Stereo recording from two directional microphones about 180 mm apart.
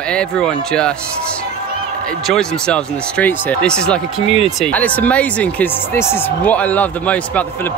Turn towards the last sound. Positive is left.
turn(degrees=10)  # may be behind; listen again after turning